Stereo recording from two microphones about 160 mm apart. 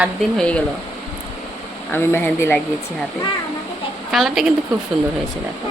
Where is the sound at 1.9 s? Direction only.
15° left (ahead or behind).